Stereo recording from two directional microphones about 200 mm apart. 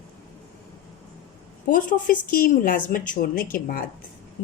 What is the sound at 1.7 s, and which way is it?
Speech, 40° left (ahead or behind).